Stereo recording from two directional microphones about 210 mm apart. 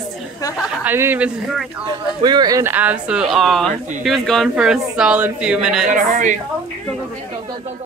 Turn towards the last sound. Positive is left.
turn(degrees=-40)  # may be behind; listen again after turning